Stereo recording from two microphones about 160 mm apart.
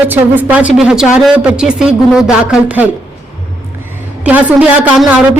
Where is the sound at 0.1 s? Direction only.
10° right (ahead or behind).